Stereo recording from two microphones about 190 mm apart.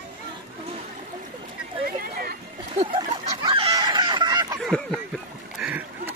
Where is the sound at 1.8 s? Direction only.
50° right (ahead or behind).